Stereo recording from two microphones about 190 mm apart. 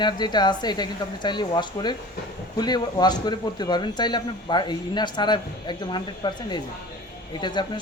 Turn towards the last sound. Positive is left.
turn(degrees=25)  # may be behind; listen again after turning